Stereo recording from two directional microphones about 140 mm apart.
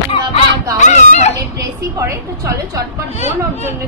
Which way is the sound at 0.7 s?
60° left (ahead or behind).